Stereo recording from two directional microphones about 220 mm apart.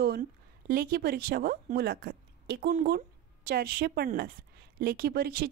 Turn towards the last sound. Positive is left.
turn(degrees=-45)  # may be behind; listen again after turning